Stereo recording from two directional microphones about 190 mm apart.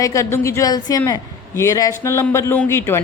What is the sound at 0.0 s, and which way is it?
A woman's voice, 15° left (ahead or behind).